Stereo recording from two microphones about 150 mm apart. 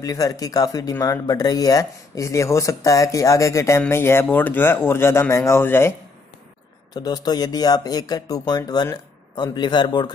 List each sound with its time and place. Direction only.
0.0 s speech: 25° left (ahead or behind)
6.9 s speech: 25° left (ahead or behind)